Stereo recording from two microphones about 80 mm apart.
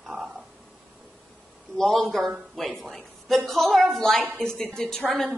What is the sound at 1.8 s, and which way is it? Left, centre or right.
A woman's voice, centre.